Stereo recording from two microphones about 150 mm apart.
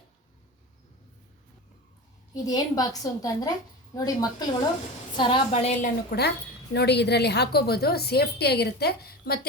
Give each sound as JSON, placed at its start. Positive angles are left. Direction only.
{"t": 2.3, "sound": "a woman's voice", "side_deg": 25}
{"t": 5.5, "sound": "a woman's voice", "side_deg": 45}
{"t": 6.1, "sound": "a woman's voice", "side_deg": 90}